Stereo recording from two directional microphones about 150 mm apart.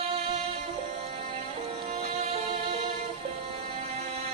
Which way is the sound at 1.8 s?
45° right (ahead or behind).